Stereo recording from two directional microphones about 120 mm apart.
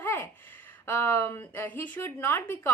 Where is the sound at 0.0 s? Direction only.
20° left (ahead or behind).